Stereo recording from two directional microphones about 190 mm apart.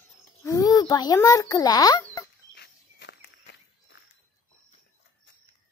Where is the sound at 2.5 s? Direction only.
65° left (ahead or behind).